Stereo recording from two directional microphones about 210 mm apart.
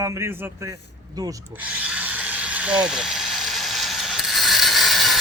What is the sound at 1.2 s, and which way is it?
Power tool, 10° right (ahead or behind).